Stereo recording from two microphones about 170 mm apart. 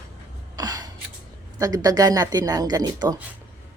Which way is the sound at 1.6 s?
20° right (ahead or behind).